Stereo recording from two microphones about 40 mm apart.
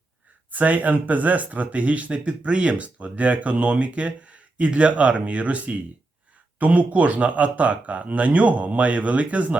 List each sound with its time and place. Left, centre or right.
0.5 s speech: right